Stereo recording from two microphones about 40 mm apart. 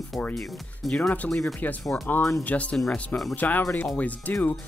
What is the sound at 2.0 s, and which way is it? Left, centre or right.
Speech, left.